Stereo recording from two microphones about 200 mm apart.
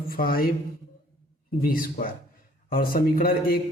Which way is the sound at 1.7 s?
45° left (ahead or behind).